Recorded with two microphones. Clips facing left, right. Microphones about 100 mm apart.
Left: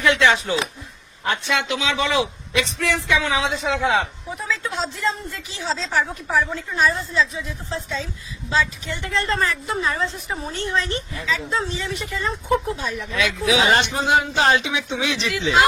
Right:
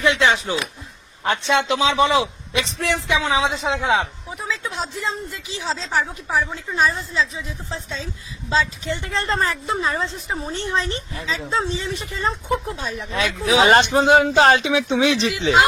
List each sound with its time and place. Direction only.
0.0 s a woman's voice: 20° right (ahead or behind); by 15.1 s 45° right (ahead or behind)
15.1 s a woman's voice: 25° right (ahead or behind)